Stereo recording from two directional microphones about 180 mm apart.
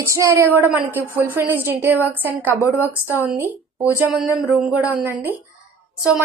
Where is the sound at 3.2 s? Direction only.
10° right (ahead or behind).